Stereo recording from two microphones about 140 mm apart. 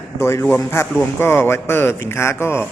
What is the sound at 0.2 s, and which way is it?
A man's voice, 20° left (ahead or behind).